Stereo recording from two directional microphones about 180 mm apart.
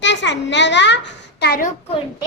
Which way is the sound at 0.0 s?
80° left.